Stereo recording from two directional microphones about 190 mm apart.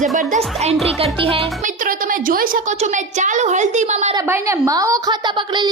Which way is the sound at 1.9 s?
50° right (ahead or behind).